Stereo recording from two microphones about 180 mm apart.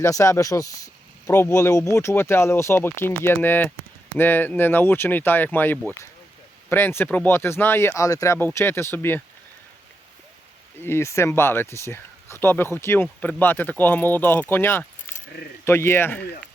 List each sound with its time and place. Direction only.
0.0 s speech: 15° left (ahead or behind)
10.8 s speech: 15° left (ahead or behind)